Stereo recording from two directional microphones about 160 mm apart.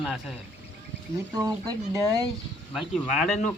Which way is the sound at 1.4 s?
20° right (ahead or behind).